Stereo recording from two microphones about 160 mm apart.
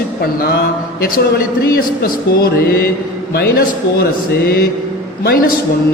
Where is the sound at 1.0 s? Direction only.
70° left (ahead or behind).